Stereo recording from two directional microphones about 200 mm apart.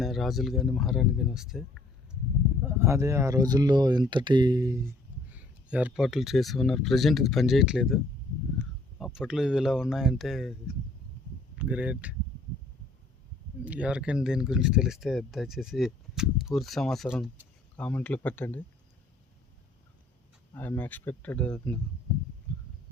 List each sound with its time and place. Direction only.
0.0 s speech: centre (ahead or behind)
2.6 s speech: 15° right (ahead or behind)
5.3 s speech: 5° right (ahead or behind)
13.7 s speech: 5° right (ahead or behind)
20.5 s speech: 10° left (ahead or behind)